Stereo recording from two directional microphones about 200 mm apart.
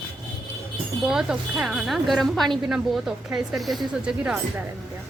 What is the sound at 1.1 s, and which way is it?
A woman's voice, 5° right (ahead or behind).